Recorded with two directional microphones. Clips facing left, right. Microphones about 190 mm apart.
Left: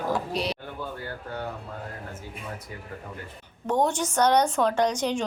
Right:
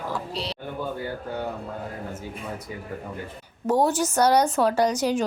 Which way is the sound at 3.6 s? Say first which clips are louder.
Right 3 dB; 5° right (ahead or behind).